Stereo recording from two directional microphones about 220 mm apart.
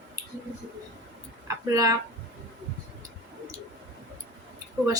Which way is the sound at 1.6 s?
15° right (ahead or behind).